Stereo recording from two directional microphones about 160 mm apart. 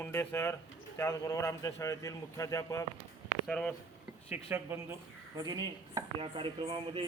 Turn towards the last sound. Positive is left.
turn(degrees=-30)  # may be behind; listen again after turning